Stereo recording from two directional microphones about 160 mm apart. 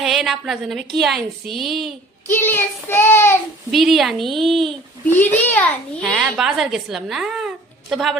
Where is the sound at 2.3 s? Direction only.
15° left (ahead or behind).